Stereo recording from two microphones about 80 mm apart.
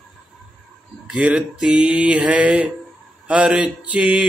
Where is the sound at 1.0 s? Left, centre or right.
Centre.